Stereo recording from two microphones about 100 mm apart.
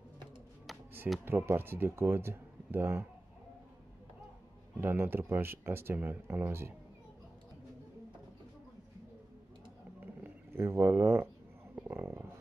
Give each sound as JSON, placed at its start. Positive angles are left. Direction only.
{"t": 0.7, "sound": "music", "side_deg": 0}
{"t": 1.2, "sound": "speech", "side_deg": -25}
{"t": 4.7, "sound": "speech", "side_deg": -20}
{"t": 9.9, "sound": "a sound", "side_deg": -20}